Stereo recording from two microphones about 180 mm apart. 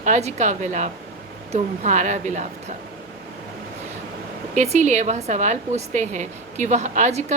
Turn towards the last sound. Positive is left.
turn(degrees=-40)  # may be behind; listen again after turning